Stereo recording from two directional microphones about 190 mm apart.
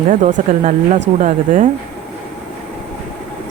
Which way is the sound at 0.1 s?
40° right (ahead or behind).